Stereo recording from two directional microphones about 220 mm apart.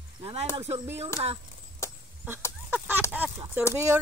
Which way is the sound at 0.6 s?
25° right (ahead or behind).